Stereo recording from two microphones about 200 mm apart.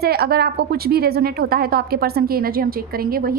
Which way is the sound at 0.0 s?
50° right (ahead or behind).